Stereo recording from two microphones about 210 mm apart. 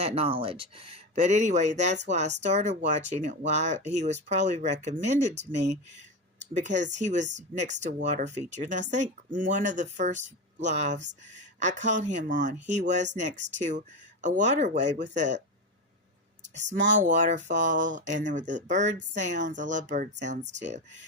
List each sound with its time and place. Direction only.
0.0 s speech: 30° right (ahead or behind)
6.5 s speech: 35° right (ahead or behind)
11.3 s a sound: 35° right (ahead or behind)
11.9 s speech: 35° right (ahead or behind)
16.9 s speech: 35° right (ahead or behind)